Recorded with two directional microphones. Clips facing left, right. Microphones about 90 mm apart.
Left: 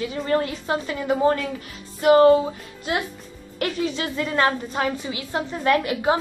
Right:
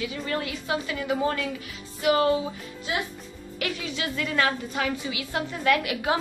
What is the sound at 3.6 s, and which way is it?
A woman's voice, 35° left (ahead or behind).